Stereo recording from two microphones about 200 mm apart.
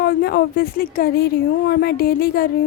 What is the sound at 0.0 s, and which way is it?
A woman's voice, 50° left (ahead or behind).